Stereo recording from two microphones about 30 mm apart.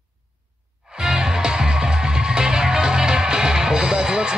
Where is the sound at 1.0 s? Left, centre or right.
Right.